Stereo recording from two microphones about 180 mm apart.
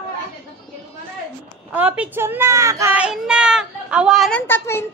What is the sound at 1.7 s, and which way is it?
A child's voice, 10° right (ahead or behind).